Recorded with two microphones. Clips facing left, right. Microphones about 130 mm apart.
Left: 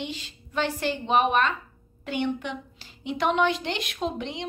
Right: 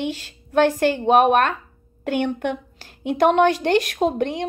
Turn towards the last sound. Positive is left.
turn(degrees=-50)  # may be behind; listen again after turning